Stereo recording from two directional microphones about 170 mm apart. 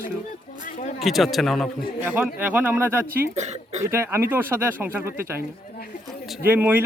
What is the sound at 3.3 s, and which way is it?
Speech, 40° right (ahead or behind).